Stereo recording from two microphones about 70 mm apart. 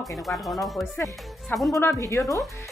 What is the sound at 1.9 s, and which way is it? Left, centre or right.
Speech, left.